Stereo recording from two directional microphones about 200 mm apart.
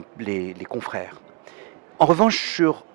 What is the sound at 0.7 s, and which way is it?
Speech, 15° right (ahead or behind).